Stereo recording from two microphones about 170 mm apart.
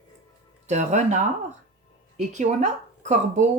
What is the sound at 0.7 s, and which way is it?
Speech, 45° right (ahead or behind).